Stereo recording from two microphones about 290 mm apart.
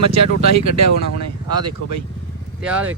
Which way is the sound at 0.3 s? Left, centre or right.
Right.